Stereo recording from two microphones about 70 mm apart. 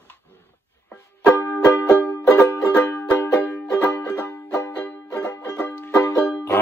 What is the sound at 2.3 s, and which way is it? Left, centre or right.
Music, left.